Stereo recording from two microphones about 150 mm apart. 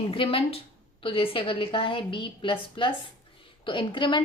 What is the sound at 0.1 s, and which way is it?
A woman's voice, 35° left (ahead or behind).